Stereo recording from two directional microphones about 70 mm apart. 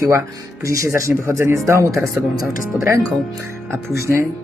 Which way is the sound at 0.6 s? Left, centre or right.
Right.